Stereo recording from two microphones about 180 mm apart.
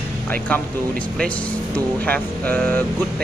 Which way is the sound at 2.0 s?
10° left (ahead or behind).